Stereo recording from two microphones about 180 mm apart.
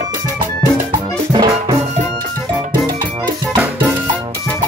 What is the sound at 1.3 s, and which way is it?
Music, 25° right (ahead or behind).